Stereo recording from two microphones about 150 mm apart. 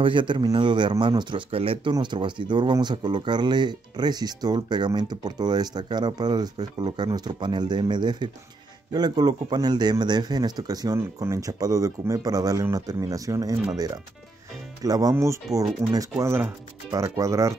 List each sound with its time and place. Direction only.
0.0 s speech: 35° right (ahead or behind)
14.8 s speech: 25° right (ahead or behind)